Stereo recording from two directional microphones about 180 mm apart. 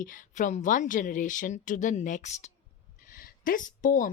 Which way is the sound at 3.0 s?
50° left (ahead or behind).